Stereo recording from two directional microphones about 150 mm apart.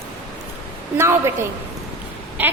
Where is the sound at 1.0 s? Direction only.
20° right (ahead or behind).